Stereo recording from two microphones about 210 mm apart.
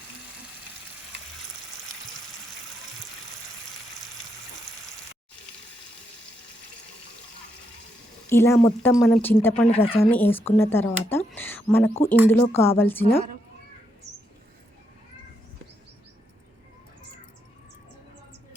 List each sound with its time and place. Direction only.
8.3 s speech: 10° left (ahead or behind)
8.9 s speech: centre (ahead or behind)
9.6 s speech: 30° left (ahead or behind)
10.0 s speech: 10° left (ahead or behind)
11.3 s a sound: 10° left (ahead or behind)
12.3 s speech: 10° left (ahead or behind)